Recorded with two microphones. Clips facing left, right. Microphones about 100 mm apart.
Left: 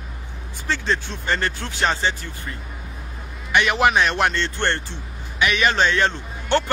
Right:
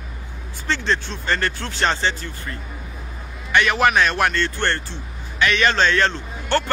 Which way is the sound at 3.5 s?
20° left (ahead or behind).